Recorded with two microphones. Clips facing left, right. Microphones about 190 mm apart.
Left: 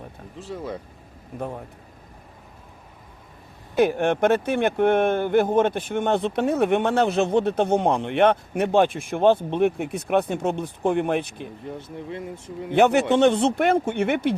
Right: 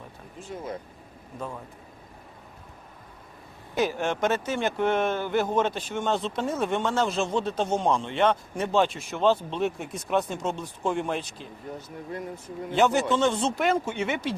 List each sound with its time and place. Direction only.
1.4 s speech: 60° left (ahead or behind)
3.8 s speech: 60° left (ahead or behind)